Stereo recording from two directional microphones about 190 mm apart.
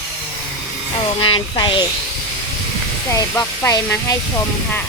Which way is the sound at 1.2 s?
25° left (ahead or behind).